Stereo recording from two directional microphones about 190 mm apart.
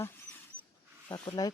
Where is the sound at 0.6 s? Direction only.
10° right (ahead or behind).